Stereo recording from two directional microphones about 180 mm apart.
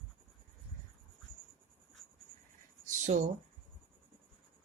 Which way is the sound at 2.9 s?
40° right (ahead or behind).